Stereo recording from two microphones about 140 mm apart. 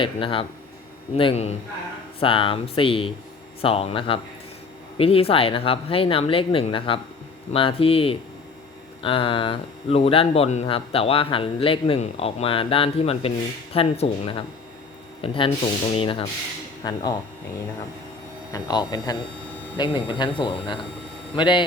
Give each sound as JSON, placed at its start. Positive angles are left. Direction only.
{"t": 0.0, "sound": "speech", "side_deg": 40}
{"t": 18.5, "sound": "speech", "side_deg": 30}